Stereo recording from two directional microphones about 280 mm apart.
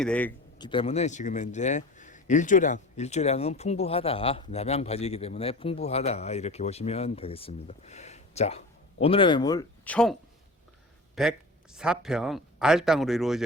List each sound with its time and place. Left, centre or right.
0.0 s speech: centre
0.6 s speech: centre